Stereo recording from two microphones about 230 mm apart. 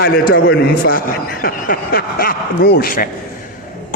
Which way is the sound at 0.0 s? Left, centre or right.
Left.